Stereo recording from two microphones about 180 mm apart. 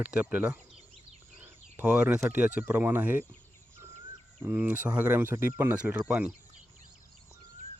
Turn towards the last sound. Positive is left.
turn(degrees=-5)  # may be behind; listen again after turning